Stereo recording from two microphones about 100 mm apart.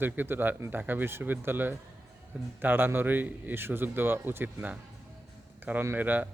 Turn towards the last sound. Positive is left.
turn(degrees=-15)  # may be behind; listen again after turning